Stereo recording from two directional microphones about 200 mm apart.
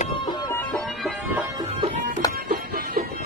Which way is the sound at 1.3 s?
15° right (ahead or behind).